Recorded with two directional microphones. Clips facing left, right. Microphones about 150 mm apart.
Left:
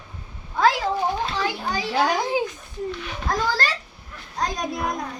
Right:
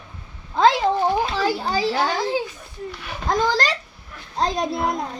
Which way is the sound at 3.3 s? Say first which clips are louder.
Right 4 dB; 25° right (ahead or behind).